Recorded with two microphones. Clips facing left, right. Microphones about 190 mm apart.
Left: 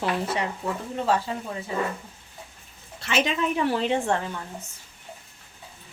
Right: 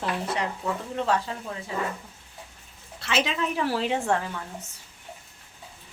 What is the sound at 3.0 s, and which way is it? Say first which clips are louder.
A woman's voice: left 2 dB; centre (ahead or behind).